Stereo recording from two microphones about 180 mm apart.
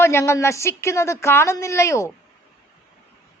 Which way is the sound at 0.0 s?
15° left (ahead or behind).